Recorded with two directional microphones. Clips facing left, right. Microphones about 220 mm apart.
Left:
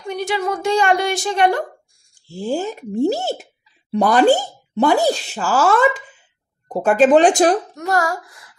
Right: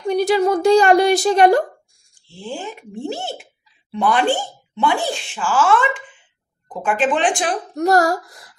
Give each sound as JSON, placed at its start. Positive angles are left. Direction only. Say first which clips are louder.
{"t": 0.1, "sound": "a woman's voice", "louder": "right 6 dB", "side_deg": -35}
{"t": 2.2, "sound": "speech", "louder": "left 7 dB", "side_deg": 40}
{"t": 7.7, "sound": "a woman's voice", "louder": "right 5 dB", "side_deg": -40}